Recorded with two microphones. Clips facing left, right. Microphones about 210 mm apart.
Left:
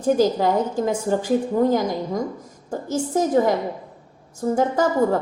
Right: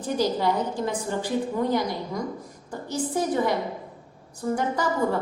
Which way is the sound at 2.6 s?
45° left (ahead or behind).